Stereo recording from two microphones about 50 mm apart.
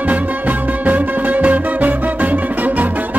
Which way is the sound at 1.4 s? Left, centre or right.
Right.